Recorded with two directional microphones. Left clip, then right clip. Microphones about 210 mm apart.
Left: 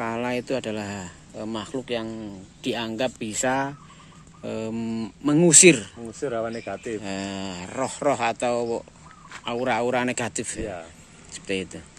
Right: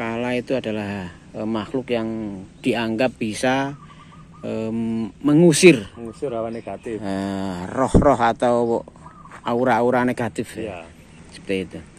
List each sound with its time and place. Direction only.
0.0 s speech: 5° left (ahead or behind)
6.2 s speech: 45° left (ahead or behind)
7.0 s speech: 10° right (ahead or behind)